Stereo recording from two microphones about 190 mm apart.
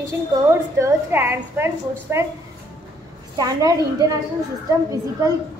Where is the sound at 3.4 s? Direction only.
20° right (ahead or behind).